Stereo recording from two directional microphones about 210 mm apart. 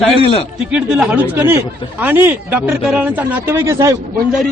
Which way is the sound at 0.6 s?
5° right (ahead or behind).